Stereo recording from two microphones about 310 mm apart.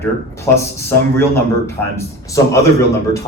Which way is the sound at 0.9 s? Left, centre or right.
Centre.